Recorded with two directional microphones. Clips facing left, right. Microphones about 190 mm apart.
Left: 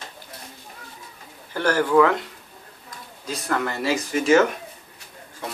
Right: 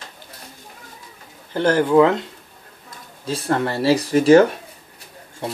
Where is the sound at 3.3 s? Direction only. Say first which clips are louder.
Right 4 dB; 30° right (ahead or behind).